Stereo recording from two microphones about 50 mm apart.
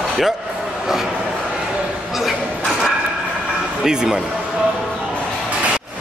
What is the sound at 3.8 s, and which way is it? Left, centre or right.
Speech, centre.